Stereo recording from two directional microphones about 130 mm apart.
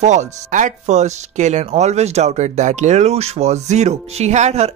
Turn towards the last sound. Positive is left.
turn(degrees=-60)  # may be behind; listen again after turning